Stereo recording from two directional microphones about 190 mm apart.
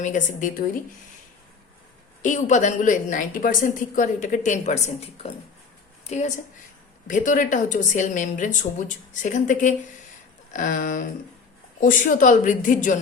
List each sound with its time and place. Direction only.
0.0 s a woman's voice: 40° left (ahead or behind)
2.2 s a woman's voice: 40° left (ahead or behind)
6.1 s a woman's voice: 35° left (ahead or behind)